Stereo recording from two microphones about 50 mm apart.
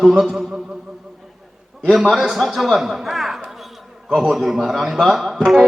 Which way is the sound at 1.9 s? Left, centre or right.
Centre.